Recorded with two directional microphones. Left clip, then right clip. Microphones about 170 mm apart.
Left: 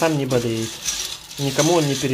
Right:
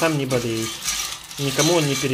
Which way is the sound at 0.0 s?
10° left (ahead or behind).